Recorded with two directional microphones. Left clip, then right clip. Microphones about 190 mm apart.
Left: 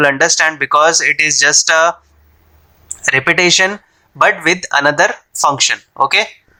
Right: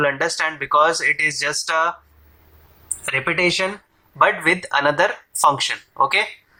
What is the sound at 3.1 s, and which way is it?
Speech, 45° left (ahead or behind).